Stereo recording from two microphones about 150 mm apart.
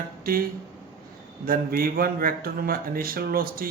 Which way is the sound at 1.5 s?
80° right.